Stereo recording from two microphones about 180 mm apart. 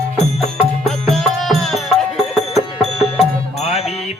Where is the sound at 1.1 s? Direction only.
Centre (ahead or behind).